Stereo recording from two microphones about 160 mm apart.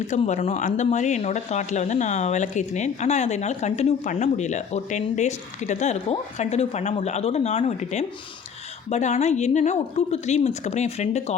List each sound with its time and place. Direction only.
0.1 s speech: 45° left (ahead or behind)